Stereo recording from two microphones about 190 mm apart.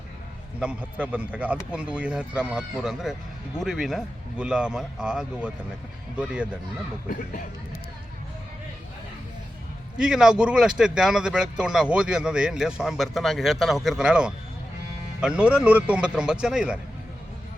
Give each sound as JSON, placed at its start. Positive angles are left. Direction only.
{"t": 0.6, "sound": "speech", "side_deg": -5}
{"t": 10.0, "sound": "speech", "side_deg": -5}